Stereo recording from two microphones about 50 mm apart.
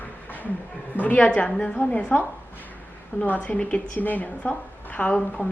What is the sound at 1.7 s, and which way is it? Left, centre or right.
Speech, left.